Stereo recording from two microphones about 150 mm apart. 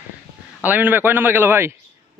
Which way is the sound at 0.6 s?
10° right (ahead or behind).